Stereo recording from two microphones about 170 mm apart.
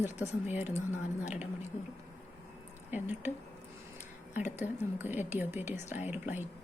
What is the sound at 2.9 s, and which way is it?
Speech, 10° right (ahead or behind).